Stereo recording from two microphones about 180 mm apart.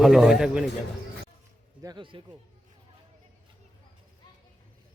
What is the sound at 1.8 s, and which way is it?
Speech, 25° right (ahead or behind).